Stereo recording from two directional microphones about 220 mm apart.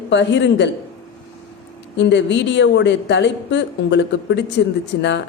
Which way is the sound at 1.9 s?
55° left (ahead or behind).